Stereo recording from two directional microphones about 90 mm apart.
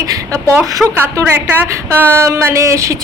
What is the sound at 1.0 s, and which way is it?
A woman's voice, 25° right (ahead or behind).